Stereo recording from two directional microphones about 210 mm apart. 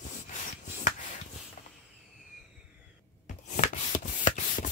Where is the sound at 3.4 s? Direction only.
35° left (ahead or behind).